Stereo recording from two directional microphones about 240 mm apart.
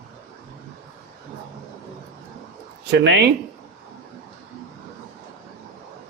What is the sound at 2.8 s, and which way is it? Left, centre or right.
Speech, right.